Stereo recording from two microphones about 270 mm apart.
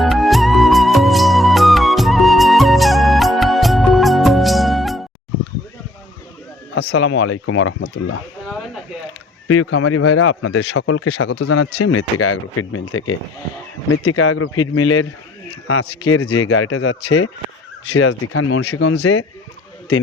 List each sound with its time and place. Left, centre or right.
0.0 s music: centre
6.9 s speech: left
8.4 s a sound: centre
9.5 s speech: left